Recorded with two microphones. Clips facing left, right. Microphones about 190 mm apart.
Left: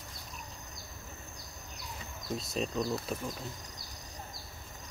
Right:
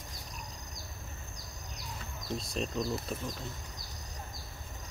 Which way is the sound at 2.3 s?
Centre (ahead or behind).